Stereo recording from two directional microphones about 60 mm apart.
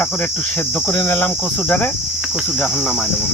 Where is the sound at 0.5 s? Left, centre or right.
Left.